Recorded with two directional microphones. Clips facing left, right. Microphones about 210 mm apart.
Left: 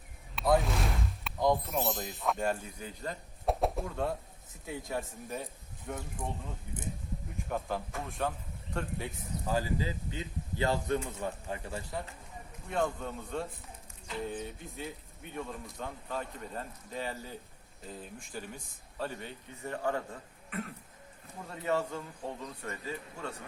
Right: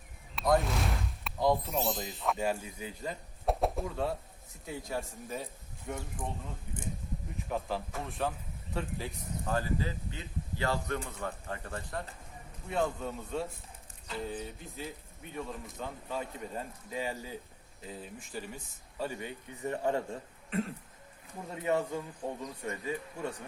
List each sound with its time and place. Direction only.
0.3 s a sound: centre (ahead or behind)
1.7 s speech: 5° left (ahead or behind)
7.5 s speech: centre (ahead or behind)
12.6 s speech: centre (ahead or behind); by 20.7 s 30° right (ahead or behind)
21.6 s speech: 15° right (ahead or behind)